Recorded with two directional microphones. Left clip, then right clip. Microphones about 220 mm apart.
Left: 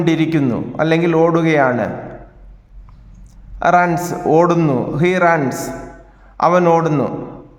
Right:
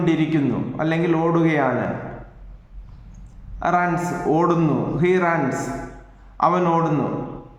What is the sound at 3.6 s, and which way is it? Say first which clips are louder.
A man's voice: left 7 dB; 45° left (ahead or behind).